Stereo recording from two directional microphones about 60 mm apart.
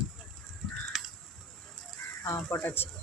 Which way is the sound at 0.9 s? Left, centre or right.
Centre.